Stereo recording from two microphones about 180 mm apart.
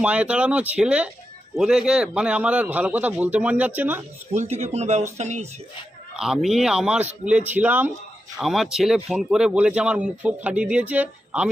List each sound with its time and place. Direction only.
0.0 s speech: 5° right (ahead or behind)
4.3 s speech: 35° right (ahead or behind)
6.1 s a man's voice: 5° right (ahead or behind)